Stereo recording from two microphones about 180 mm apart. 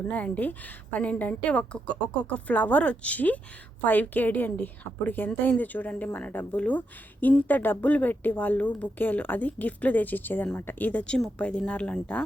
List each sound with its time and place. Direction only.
0.1 s a woman's voice: 10° left (ahead or behind)